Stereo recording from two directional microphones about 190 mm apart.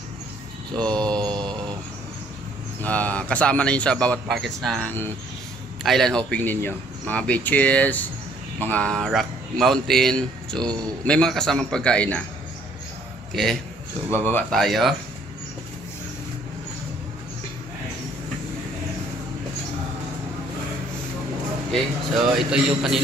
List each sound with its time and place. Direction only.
0.7 s speech: 5° left (ahead or behind)
1.5 s a sound: 20° right (ahead or behind)
2.8 s speech: 10° left (ahead or behind)
13.3 s speech: centre (ahead or behind)
22.3 s speech: centre (ahead or behind)